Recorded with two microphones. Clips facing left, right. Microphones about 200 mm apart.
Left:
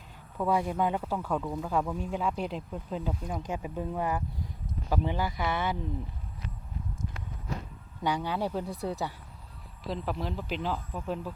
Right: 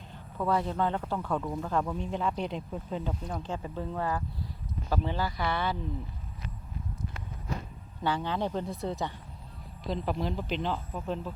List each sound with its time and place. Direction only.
0.3 s speech: 10° left (ahead or behind)
8.0 s speech: 10° left (ahead or behind)